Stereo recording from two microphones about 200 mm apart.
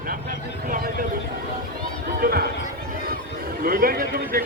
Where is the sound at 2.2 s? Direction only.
50° right (ahead or behind).